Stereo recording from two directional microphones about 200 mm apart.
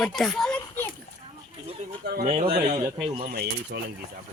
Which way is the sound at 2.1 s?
50° right (ahead or behind).